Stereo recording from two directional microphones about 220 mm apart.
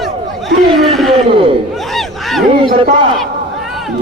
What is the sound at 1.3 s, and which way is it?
Chuckle, 25° right (ahead or behind).